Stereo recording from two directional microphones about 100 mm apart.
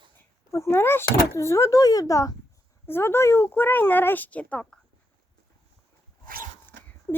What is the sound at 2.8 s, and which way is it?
Speech, 25° left (ahead or behind).